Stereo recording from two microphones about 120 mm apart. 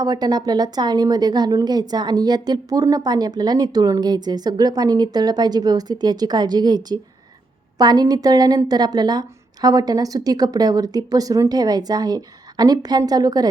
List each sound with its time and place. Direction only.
0.0 s a woman's voice: 35° right (ahead or behind)